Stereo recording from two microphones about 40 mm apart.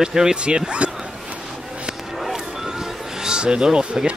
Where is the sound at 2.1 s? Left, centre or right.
Centre; by 4.1 s right.